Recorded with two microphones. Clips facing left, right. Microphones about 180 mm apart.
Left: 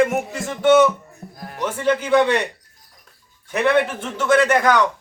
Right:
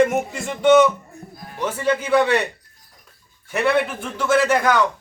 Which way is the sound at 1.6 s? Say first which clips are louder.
Left 1 dB; 10° right (ahead or behind).